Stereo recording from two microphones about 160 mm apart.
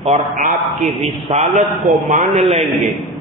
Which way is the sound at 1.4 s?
50° right (ahead or behind).